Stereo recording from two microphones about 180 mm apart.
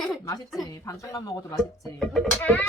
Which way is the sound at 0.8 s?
15° left (ahead or behind).